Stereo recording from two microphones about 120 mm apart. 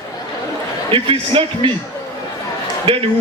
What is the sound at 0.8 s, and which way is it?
Speech, 50° right (ahead or behind).